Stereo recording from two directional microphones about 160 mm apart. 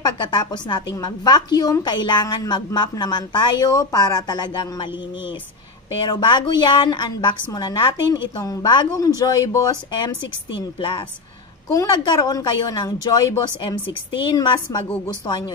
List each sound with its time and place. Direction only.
0.0 s a woman's voice: 25° left (ahead or behind)
6.0 s a woman's voice: 30° left (ahead or behind)